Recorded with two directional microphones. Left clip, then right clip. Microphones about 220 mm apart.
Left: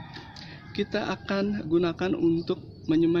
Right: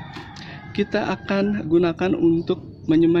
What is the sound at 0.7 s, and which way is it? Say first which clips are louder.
A man's voice: right 6 dB; 5° right (ahead or behind).